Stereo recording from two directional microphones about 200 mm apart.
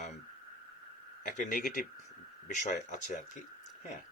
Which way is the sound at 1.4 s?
40° left (ahead or behind).